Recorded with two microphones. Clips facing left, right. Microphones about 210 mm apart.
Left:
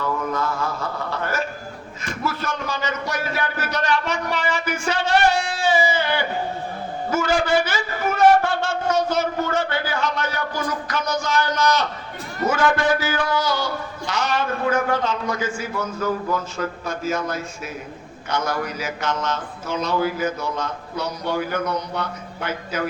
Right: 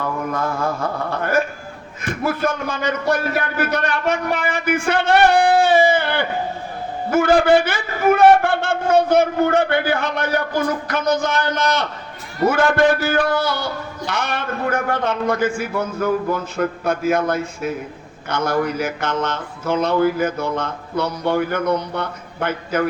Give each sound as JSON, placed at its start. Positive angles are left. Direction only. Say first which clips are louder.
{"t": 0.0, "sound": "a man's voice", "louder": "right 1 dB", "side_deg": -50}